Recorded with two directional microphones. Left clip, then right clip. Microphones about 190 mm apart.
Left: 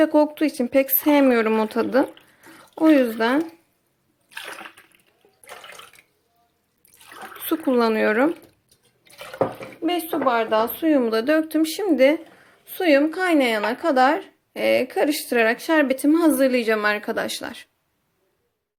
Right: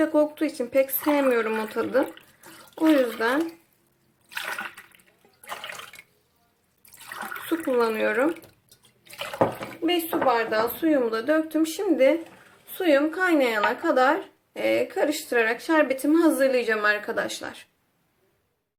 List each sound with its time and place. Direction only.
0.0 s speech: 40° left (ahead or behind)
4.3 s water: centre (ahead or behind)
7.5 s speech: 45° left (ahead or behind)
9.8 s speech: 40° left (ahead or behind)